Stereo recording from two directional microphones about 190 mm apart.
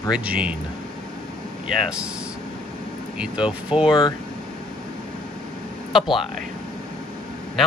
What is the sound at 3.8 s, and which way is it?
Speech, 25° left (ahead or behind).